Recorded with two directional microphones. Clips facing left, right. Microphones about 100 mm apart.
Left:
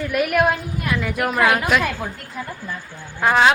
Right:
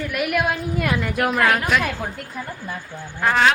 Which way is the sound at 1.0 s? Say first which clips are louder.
Left 3 dB; centre (ahead or behind).